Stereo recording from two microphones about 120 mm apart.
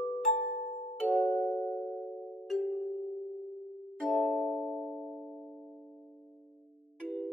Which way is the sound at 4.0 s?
10° left (ahead or behind).